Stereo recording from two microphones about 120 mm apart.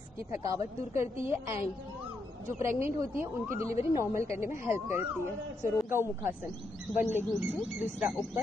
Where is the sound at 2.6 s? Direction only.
20° right (ahead or behind).